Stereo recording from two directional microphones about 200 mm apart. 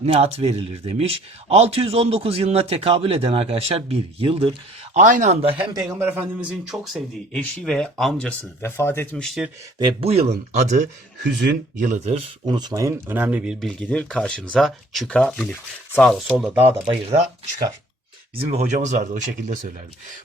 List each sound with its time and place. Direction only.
0.0 s speech: 30° right (ahead or behind)
4.9 s speech: 40° right (ahead or behind)
5.7 s speech: 10° right (ahead or behind); by 9.2 s 10° left (ahead or behind)
9.2 s speech: centre (ahead or behind)
9.7 s speech: 25° right (ahead or behind); by 16.8 s 10° right (ahead or behind)
18.3 s speech: 35° right (ahead or behind)